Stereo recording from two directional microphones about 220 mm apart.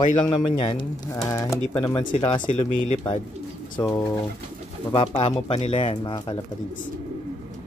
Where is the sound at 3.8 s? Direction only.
10° left (ahead or behind).